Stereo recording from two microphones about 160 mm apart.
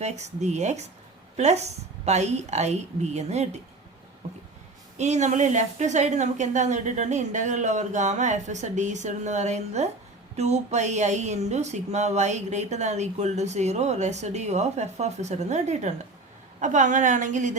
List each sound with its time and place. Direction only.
0.0 s speech: 45° right (ahead or behind)
4.9 s speech: 45° right (ahead or behind)